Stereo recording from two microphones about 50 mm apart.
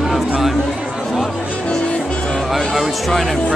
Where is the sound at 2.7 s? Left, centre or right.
Centre.